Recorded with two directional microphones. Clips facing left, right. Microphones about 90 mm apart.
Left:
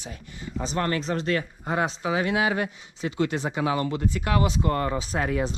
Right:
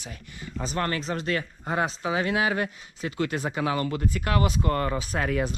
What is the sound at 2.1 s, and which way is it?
Speech, 20° left (ahead or behind).